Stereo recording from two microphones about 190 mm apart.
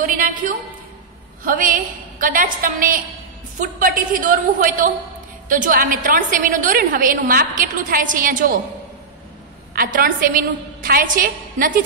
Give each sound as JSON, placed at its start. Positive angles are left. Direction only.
{"t": 0.0, "sound": "a sound", "side_deg": -45}
{"t": 1.4, "sound": "a woman's voice", "side_deg": -45}
{"t": 9.8, "sound": "a woman's voice", "side_deg": -45}